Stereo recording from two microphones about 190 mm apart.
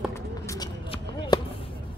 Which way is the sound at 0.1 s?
15° left (ahead or behind).